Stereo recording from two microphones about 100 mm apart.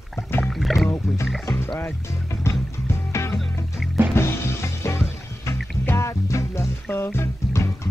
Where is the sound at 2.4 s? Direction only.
25° left (ahead or behind).